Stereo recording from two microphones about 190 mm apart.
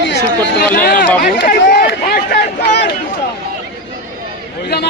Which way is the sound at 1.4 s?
65° left (ahead or behind).